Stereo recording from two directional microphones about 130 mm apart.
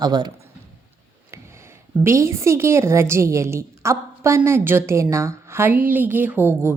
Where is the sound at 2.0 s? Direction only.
20° right (ahead or behind).